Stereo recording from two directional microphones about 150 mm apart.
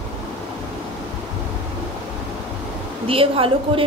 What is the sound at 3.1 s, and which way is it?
Speech, 35° right (ahead or behind).